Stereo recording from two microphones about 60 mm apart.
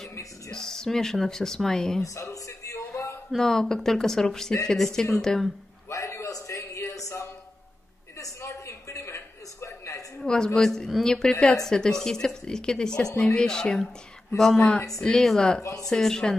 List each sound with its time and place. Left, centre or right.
0.5 s a woman's voice: centre
2.3 s music: left
3.3 s a woman's voice: centre
5.9 s a sound: left
10.2 s a woman's voice: centre
15.6 s speech: left
15.9 s a woman's voice: centre